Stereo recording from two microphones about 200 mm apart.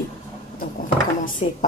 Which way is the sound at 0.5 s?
40° left (ahead or behind).